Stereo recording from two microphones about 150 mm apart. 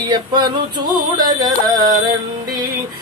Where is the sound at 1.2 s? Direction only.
25° right (ahead or behind).